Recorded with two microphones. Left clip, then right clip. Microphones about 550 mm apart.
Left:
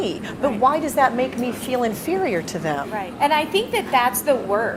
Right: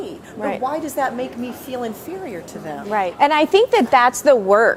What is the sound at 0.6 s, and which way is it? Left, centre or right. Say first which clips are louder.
Speech: left 6 dB; left.